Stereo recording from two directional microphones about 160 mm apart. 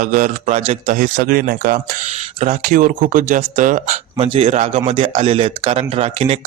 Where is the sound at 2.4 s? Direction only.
50° right (ahead or behind).